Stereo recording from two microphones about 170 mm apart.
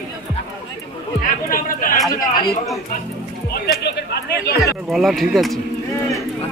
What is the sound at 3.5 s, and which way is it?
Speech, 70° left (ahead or behind).